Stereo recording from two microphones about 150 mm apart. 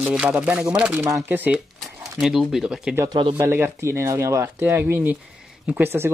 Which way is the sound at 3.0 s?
30° right (ahead or behind).